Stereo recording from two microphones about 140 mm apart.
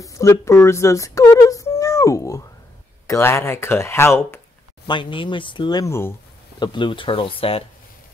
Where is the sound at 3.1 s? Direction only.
20° left (ahead or behind).